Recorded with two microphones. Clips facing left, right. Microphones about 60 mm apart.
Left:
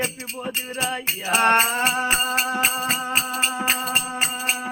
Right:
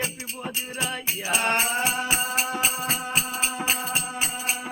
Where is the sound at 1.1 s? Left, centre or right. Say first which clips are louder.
Left 7 dB; left.